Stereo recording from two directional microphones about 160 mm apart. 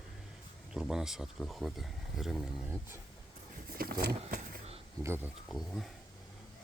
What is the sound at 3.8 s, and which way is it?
Speech, 75° right (ahead or behind).